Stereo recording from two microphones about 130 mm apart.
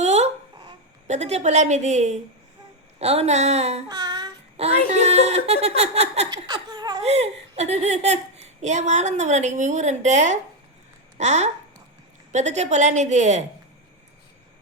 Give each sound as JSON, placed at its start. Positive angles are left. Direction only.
{"t": 0.0, "sound": "babbling", "side_deg": -60}
{"t": 1.0, "sound": "speech", "side_deg": -60}
{"t": 3.8, "sound": "child singing", "side_deg": -30}
{"t": 4.9, "sound": "speech", "side_deg": -60}
{"t": 6.3, "sound": "laughter", "side_deg": -35}
{"t": 7.0, "sound": "speech", "side_deg": -55}